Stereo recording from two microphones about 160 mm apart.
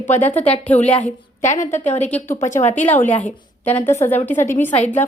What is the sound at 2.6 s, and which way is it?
Speech, 50° left (ahead or behind).